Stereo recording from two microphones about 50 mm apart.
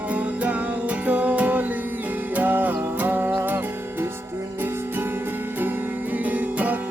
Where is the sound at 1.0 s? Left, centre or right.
Right.